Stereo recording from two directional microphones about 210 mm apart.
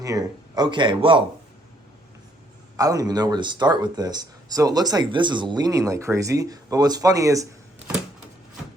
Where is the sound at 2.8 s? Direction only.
15° right (ahead or behind).